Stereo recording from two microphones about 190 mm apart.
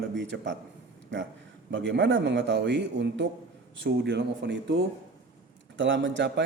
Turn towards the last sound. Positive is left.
turn(degrees=-70)  # may be behind; listen again after turning